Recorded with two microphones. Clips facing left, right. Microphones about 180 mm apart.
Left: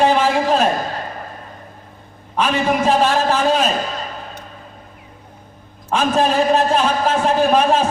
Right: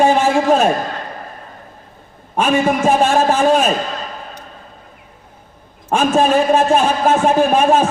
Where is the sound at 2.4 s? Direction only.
45° right (ahead or behind).